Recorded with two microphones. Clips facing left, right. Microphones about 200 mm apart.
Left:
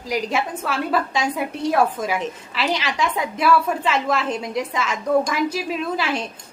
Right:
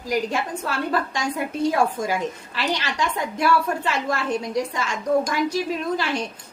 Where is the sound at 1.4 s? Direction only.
75° left (ahead or behind).